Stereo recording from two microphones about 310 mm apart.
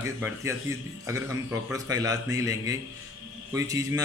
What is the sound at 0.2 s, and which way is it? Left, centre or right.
A man's voice, centre.